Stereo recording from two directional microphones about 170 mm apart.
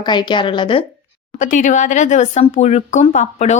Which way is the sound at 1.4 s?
45° left (ahead or behind).